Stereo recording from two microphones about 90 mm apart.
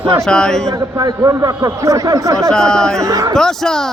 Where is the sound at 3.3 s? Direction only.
5° left (ahead or behind).